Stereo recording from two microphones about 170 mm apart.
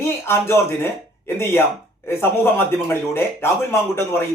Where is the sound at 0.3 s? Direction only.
15° left (ahead or behind).